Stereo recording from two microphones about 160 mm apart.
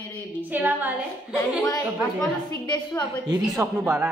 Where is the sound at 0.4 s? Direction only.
10° right (ahead or behind).